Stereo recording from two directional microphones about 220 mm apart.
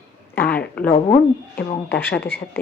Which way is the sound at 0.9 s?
25° left (ahead or behind).